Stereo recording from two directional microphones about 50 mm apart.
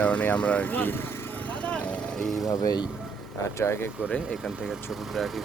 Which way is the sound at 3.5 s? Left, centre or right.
Left.